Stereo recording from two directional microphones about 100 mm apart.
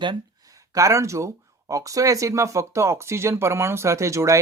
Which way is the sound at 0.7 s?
30° right (ahead or behind).